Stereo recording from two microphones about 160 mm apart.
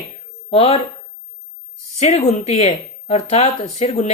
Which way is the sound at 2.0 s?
45° left (ahead or behind).